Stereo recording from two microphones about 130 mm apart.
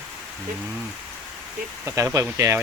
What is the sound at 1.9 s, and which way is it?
Speech, 25° right (ahead or behind).